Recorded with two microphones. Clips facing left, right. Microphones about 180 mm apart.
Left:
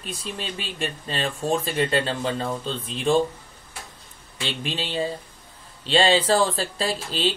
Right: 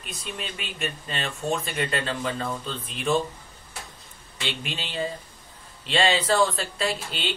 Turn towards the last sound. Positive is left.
turn(degrees=35)  # may be behind; listen again after turning